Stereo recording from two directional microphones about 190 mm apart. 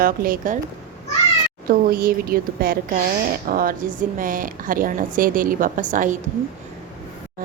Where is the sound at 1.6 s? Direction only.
50° right (ahead or behind).